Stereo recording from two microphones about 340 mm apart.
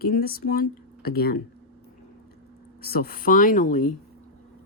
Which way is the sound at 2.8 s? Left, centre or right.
Left.